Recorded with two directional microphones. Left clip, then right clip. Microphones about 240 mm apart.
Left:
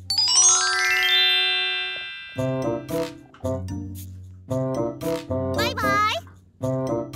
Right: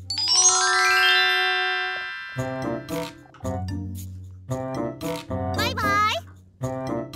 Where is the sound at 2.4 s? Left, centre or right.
Centre.